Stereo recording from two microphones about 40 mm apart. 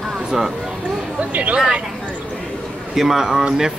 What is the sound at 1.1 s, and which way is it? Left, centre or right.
Speech, right.